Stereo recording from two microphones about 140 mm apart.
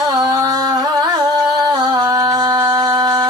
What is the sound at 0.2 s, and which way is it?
Music, 30° right (ahead or behind).